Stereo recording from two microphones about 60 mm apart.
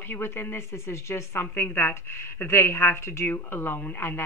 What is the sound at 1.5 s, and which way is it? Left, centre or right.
Speech, left.